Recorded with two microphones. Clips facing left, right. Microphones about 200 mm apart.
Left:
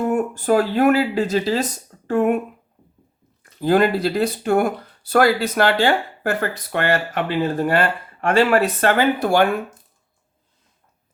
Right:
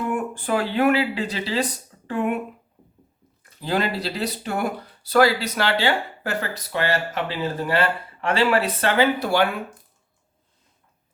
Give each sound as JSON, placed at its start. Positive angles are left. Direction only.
{"t": 0.1, "sound": "speech", "side_deg": 40}
{"t": 3.6, "sound": "speech", "side_deg": 50}